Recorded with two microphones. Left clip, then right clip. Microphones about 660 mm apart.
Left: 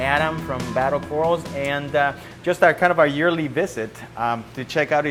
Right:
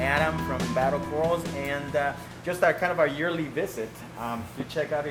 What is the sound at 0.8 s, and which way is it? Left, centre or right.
Speech, left.